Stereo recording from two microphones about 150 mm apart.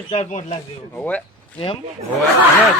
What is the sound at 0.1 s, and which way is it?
Speech, 45° left (ahead or behind).